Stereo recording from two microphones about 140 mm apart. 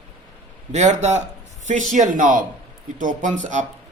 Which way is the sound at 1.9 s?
70° right (ahead or behind).